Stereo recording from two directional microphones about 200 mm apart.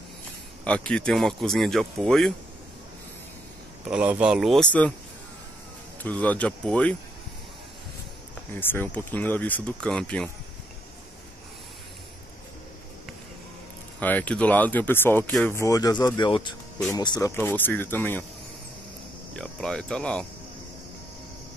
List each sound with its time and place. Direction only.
0.7 s speech: 5° left (ahead or behind)
3.8 s speech: 5° right (ahead or behind)
6.0 s speech: 5° left (ahead or behind)
8.5 s speech: 10° left (ahead or behind)
13.9 s speech: 10° left (ahead or behind)
19.3 s speech: 5° left (ahead or behind)